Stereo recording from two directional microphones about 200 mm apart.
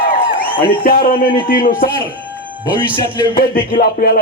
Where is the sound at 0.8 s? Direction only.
45° left (ahead or behind).